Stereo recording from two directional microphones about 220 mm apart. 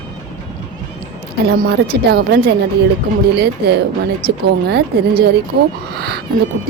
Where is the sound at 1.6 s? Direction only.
45° right (ahead or behind).